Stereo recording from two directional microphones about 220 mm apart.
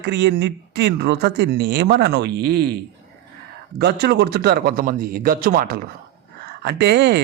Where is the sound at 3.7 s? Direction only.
50° right (ahead or behind).